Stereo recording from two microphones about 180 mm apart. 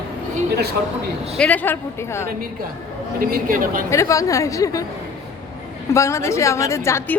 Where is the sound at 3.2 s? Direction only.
50° right (ahead or behind).